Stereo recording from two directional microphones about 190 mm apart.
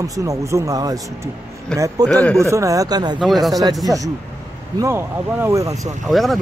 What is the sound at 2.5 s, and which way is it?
Speech, 15° right (ahead or behind).